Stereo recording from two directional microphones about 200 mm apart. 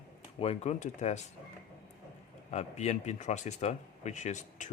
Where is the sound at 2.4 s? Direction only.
35° left (ahead or behind).